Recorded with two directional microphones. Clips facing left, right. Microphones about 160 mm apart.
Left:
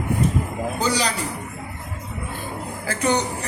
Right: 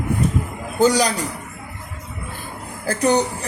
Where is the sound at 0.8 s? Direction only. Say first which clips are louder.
Right 8 dB; 45° right (ahead or behind).